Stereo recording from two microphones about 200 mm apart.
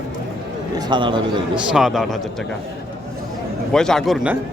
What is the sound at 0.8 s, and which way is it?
Speech, 25° right (ahead or behind).